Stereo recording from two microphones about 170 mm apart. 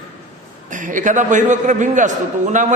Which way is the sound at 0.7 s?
50° right (ahead or behind).